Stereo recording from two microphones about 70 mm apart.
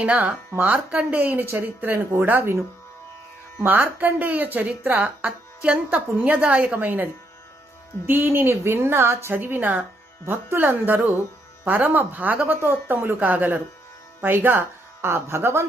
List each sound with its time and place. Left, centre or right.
0.0 s speech: centre; by 2.6 s right
3.6 s speech: right